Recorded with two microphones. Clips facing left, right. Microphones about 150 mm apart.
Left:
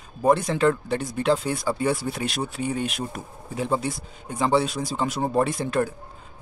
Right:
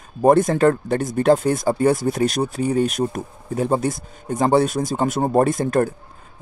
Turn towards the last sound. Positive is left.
turn(degrees=-45)  # may be behind; listen again after turning